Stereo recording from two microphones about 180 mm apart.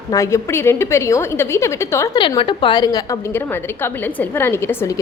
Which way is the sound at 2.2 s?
25° left (ahead or behind).